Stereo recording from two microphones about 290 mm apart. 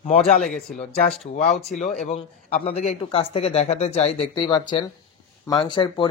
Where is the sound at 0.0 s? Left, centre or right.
Centre.